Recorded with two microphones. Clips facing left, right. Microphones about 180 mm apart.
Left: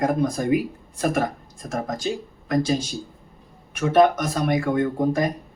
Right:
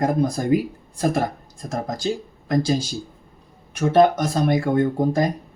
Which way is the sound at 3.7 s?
30° right (ahead or behind).